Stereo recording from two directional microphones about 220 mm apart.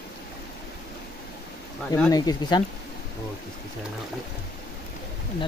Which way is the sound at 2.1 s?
15° left (ahead or behind).